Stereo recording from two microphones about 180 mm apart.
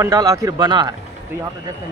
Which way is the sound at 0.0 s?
20° right (ahead or behind).